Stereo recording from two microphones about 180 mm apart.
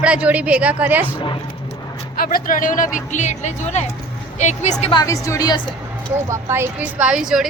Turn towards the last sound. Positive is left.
turn(degrees=-5)  # may be behind; listen again after turning